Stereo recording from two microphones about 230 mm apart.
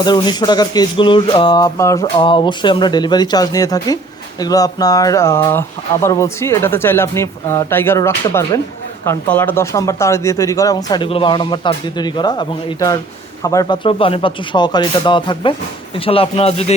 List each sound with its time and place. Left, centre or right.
0.0 s speech: centre